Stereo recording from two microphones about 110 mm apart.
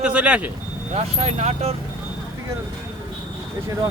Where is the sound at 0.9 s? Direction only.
80° right.